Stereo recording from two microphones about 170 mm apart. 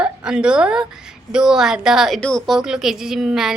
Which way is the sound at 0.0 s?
5° right (ahead or behind).